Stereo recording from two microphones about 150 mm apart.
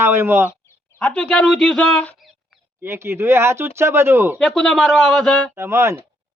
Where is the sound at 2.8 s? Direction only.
15° right (ahead or behind).